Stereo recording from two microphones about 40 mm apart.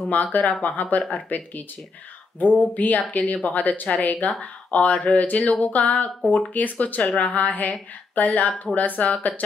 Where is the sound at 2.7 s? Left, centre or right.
Left.